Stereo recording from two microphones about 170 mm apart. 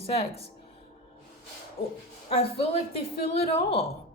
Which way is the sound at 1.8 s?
60° left (ahead or behind).